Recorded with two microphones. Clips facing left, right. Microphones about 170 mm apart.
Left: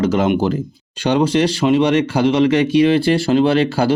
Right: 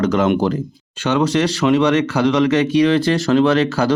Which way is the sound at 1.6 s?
20° left (ahead or behind).